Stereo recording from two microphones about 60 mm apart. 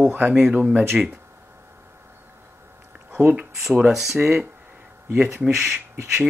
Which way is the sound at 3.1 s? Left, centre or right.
Right.